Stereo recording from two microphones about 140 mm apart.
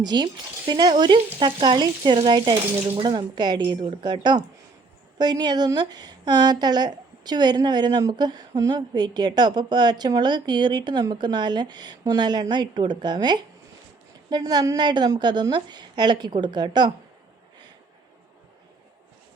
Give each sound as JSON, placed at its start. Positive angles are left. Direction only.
{"t": 0.0, "sound": "a woman's voice", "side_deg": -30}